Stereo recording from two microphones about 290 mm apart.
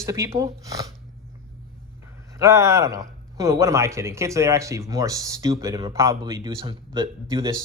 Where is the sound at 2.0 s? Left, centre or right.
Centre.